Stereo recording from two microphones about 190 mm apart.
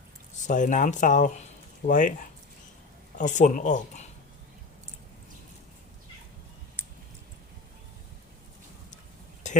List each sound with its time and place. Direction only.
0.4 s speech: 40° left (ahead or behind)
3.2 s speech: 40° left (ahead or behind)